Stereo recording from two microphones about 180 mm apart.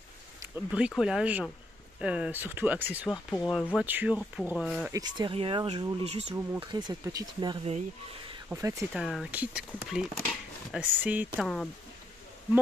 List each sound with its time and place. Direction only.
0.7 s speech: 5° right (ahead or behind)
4.9 s speech: 25° right (ahead or behind)
6.0 s speech: 35° right (ahead or behind)
6.6 s speech: 25° right (ahead or behind)
8.9 s speech: centre (ahead or behind)